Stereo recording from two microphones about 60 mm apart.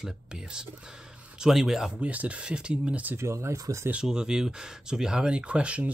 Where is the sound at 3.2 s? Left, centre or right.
Right.